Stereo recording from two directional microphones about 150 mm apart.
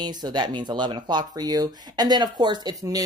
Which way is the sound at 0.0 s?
30° right (ahead or behind).